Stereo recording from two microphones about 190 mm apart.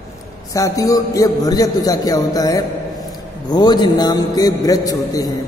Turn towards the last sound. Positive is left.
turn(degrees=20)  # may be behind; listen again after turning